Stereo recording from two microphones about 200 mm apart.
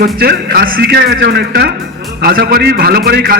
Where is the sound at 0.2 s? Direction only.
50° right (ahead or behind).